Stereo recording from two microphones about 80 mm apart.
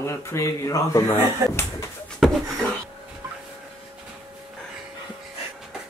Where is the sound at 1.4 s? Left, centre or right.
Right.